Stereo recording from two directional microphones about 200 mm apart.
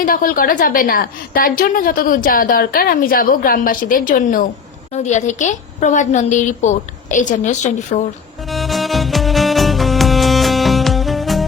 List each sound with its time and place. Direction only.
0.0 s a woman's voice: 45° left (ahead or behind)
8.4 s music: centre (ahead or behind)